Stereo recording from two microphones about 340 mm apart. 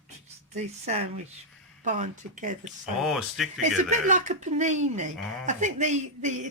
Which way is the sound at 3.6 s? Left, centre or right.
Right.